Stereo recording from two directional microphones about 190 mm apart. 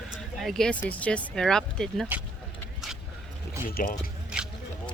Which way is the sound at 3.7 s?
50° left (ahead or behind).